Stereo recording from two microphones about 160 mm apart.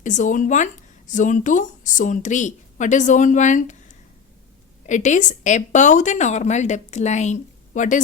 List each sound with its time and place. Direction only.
0.0 s speech: 50° left (ahead or behind)